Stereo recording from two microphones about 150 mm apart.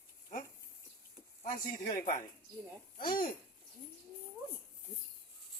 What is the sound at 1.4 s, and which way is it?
Speech, 65° left (ahead or behind).